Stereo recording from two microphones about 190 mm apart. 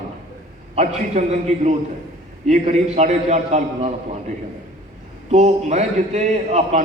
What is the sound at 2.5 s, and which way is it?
A man's voice, 35° right (ahead or behind).